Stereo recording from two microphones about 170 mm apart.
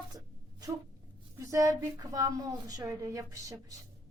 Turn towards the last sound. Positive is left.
turn(degrees=-20)  # may be behind; listen again after turning